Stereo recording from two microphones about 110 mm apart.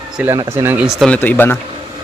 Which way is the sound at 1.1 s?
15° left (ahead or behind).